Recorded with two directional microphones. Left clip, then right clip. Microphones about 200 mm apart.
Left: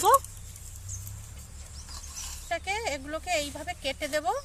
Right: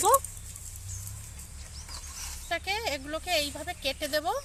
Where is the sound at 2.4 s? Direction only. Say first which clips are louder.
Even; centre (ahead or behind).